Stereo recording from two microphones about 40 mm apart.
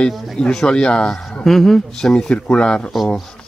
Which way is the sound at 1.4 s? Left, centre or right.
Centre.